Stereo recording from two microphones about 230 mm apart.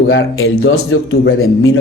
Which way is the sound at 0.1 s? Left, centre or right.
Left.